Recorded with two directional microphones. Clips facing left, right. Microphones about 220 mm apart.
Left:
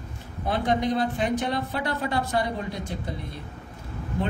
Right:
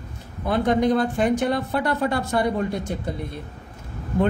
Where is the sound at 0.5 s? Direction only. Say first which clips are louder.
Right 5 dB; 50° right (ahead or behind).